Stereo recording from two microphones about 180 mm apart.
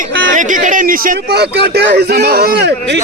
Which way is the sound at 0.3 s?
45° right (ahead or behind).